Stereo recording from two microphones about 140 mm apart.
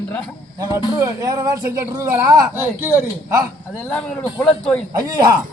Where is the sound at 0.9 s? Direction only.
25° right (ahead or behind).